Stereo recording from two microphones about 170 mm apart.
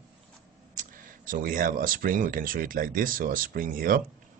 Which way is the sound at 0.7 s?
55° right (ahead or behind).